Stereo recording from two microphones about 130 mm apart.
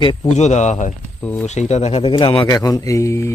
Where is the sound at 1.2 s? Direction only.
10° left (ahead or behind).